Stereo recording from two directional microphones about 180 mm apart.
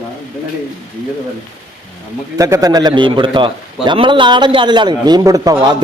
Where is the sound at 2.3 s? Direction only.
20° right (ahead or behind).